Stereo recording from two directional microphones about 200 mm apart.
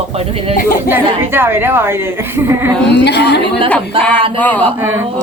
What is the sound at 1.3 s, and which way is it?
A woman's voice, 10° right (ahead or behind).